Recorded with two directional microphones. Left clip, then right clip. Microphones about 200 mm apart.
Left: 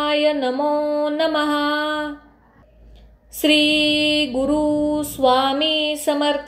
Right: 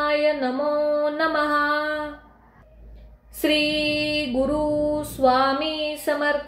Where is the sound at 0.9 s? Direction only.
25° left (ahead or behind).